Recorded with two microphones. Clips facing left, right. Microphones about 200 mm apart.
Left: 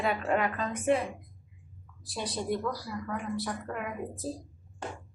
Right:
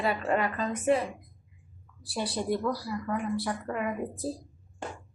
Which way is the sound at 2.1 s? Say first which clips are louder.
Right 2 dB; 10° right (ahead or behind).